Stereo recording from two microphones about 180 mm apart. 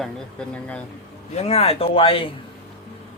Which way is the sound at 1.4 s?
35° left (ahead or behind).